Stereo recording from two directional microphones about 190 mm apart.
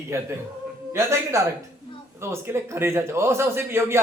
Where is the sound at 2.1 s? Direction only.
15° right (ahead or behind).